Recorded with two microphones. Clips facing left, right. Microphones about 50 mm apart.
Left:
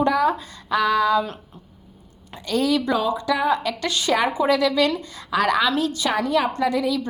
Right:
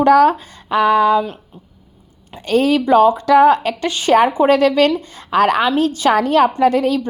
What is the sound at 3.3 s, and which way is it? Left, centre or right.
Speech, right.